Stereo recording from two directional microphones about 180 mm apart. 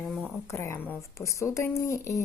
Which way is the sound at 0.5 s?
15° left (ahead or behind).